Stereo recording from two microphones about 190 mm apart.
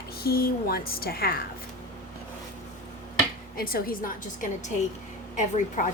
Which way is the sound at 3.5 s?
50° left (ahead or behind).